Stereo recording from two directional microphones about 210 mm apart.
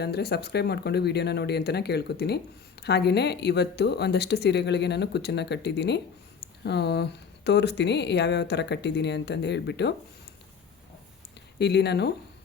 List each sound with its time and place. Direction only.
0.0 s speech: 50° left (ahead or behind)
11.6 s speech: 50° left (ahead or behind)